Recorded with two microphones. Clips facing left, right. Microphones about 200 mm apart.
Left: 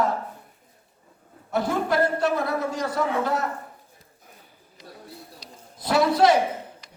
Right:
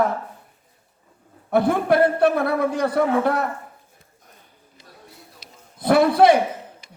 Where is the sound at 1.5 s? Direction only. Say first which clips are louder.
Right 5 dB; 60° right (ahead or behind).